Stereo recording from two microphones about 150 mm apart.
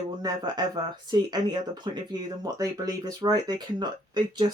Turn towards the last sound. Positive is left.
turn(degrees=-30)  # may be behind; listen again after turning